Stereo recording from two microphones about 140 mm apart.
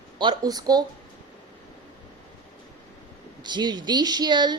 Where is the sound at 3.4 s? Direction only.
30° right (ahead or behind).